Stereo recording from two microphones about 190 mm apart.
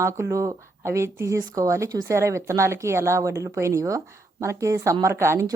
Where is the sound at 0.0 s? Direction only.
15° right (ahead or behind).